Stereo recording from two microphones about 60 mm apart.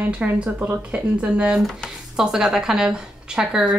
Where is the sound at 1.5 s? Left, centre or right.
Centre.